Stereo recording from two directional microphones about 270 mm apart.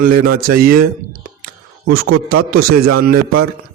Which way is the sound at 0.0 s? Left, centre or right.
Right.